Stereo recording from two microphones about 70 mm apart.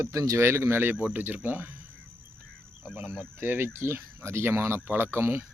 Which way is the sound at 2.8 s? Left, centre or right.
Right.